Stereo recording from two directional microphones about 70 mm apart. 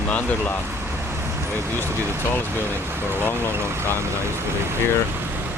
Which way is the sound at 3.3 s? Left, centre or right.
Right.